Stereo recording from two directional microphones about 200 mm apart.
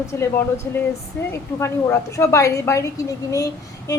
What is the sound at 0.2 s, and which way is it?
A woman's voice, 15° left (ahead or behind).